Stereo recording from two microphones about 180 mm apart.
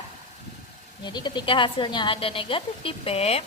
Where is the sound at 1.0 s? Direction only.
25° left (ahead or behind).